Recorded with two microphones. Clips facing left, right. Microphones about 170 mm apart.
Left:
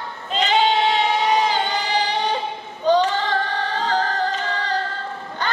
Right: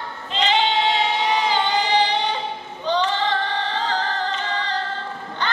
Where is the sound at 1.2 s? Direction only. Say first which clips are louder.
Left 1 dB; 45° left (ahead or behind).